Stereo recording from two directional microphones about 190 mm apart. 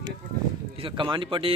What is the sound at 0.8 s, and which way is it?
Speech, 25° right (ahead or behind).